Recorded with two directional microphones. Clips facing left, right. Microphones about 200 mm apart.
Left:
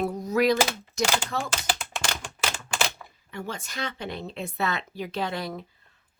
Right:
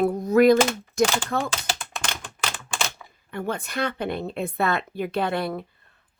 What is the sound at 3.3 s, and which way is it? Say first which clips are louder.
Speech: right 7 dB; 55° right (ahead or behind).